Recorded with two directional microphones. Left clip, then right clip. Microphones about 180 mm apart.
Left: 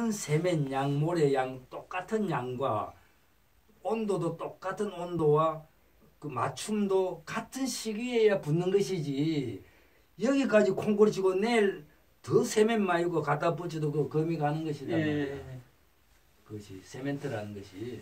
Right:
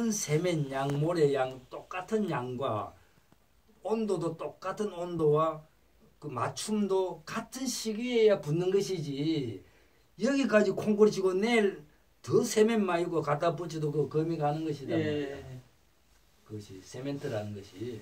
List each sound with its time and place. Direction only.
0.0 s speech: 5° left (ahead or behind)
3.8 s a man's voice: 10° left (ahead or behind)
16.5 s a man's voice: 5° left (ahead or behind)